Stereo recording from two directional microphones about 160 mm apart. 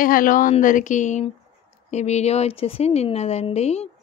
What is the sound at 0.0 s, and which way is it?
A woman's voice, 60° left (ahead or behind).